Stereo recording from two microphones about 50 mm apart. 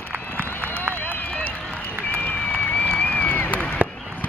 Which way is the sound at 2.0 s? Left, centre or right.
Left.